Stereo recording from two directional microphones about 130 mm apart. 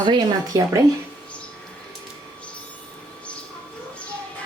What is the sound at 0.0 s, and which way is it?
Speech, 30° right (ahead or behind).